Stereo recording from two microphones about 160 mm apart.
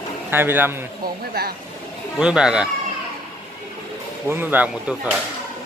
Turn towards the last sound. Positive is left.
turn(degrees=-5)  # may be behind; listen again after turning